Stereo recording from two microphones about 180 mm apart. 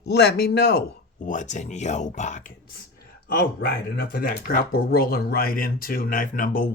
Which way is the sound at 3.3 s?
60° left (ahead or behind).